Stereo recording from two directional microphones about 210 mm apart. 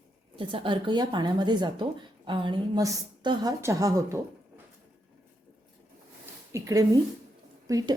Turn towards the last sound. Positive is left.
turn(degrees=-20)  # may be behind; listen again after turning